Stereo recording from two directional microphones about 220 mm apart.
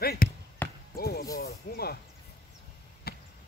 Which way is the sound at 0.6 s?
10° left (ahead or behind).